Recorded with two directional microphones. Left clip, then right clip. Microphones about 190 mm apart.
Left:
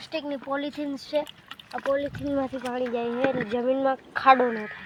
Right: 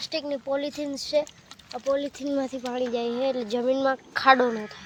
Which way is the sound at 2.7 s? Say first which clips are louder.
Right 3 dB; 25° right (ahead or behind).